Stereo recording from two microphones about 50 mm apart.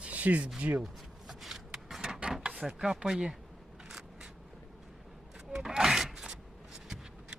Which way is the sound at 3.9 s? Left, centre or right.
Centre.